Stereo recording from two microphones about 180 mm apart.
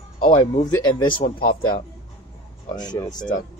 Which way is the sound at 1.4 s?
55° left (ahead or behind).